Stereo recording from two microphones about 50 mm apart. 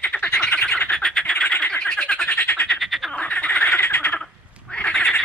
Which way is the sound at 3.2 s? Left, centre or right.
Left.